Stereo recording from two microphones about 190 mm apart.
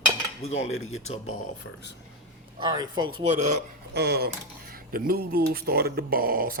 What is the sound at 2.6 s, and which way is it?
Speech, 20° right (ahead or behind).